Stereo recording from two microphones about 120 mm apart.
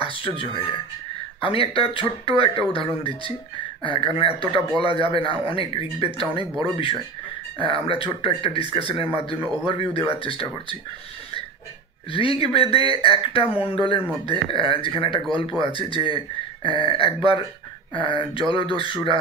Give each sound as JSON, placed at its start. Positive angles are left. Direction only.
{"t": 0.0, "sound": "speech", "side_deg": 50}
{"t": 12.1, "sound": "speech", "side_deg": 50}